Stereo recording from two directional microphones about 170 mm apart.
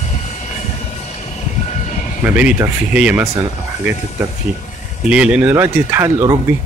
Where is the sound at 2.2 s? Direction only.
10° right (ahead or behind).